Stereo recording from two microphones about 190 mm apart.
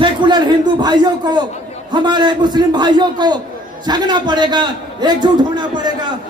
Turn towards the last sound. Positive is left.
turn(degrees=-20)  # may be behind; listen again after turning